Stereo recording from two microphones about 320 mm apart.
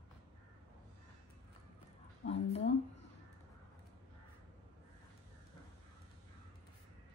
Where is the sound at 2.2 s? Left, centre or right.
Centre.